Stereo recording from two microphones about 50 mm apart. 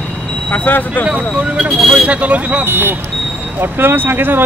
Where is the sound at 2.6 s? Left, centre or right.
Right.